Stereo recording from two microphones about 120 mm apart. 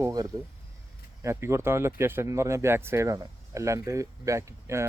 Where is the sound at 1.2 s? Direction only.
25° right (ahead or behind).